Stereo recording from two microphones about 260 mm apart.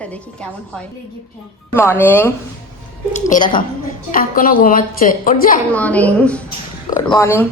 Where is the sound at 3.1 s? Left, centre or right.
Left.